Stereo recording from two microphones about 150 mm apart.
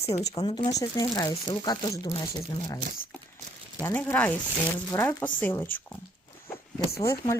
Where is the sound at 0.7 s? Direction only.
25° left (ahead or behind).